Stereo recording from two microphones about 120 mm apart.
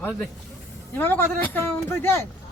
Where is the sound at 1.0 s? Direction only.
15° left (ahead or behind).